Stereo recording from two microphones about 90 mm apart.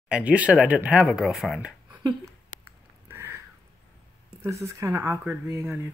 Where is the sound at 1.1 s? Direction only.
5° right (ahead or behind).